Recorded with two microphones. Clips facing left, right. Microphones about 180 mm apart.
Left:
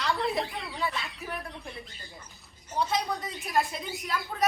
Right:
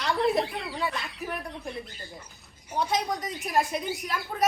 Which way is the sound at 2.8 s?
20° right (ahead or behind).